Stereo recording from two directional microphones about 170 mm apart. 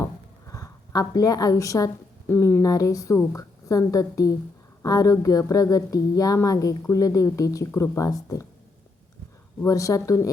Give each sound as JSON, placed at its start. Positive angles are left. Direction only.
{"t": 0.0, "sound": "a woman's voice", "side_deg": 20}
{"t": 9.6, "sound": "speech", "side_deg": 20}